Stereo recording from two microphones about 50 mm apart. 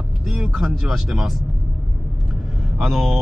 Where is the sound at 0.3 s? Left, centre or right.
Centre.